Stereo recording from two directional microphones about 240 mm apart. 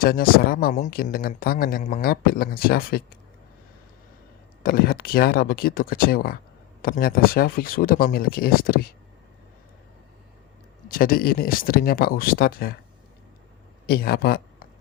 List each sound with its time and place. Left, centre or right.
0.0 s speech: left
4.6 s speech: left
10.8 s speech: left
13.8 s speech: left